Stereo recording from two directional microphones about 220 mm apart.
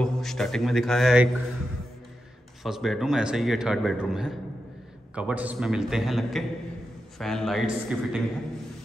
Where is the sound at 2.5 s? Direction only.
Centre (ahead or behind).